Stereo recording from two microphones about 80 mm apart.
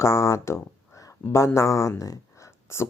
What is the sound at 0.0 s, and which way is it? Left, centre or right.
Speech, left.